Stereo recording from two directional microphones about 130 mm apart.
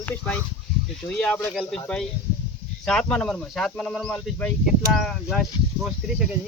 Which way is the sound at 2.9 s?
5° left (ahead or behind).